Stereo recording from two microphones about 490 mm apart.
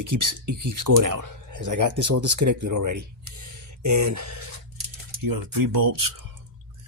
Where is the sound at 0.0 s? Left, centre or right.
Right.